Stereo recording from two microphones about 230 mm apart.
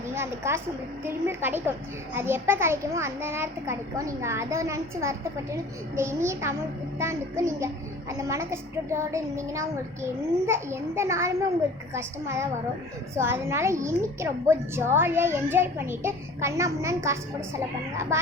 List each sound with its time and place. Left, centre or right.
0.1 s a woman's voice: centre